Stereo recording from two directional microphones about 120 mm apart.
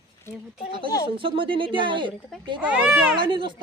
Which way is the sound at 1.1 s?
45° right (ahead or behind).